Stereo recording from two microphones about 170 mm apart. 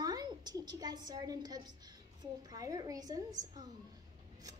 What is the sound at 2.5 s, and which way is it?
Speech, 20° right (ahead or behind).